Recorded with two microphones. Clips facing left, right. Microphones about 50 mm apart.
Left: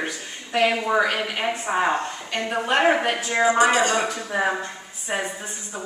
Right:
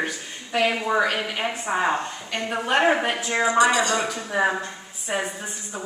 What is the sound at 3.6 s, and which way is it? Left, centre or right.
Speech, left.